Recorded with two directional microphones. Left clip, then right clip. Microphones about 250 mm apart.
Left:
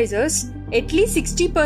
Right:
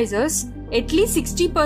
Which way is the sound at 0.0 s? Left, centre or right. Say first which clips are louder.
Left 1 dB; centre.